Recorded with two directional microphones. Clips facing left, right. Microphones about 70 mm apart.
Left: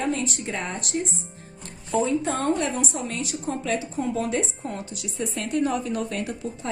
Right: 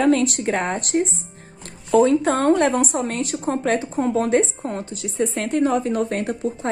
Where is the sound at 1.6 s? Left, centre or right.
Right.